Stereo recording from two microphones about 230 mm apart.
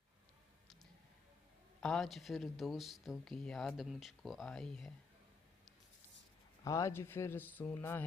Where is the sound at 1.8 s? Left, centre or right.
Centre.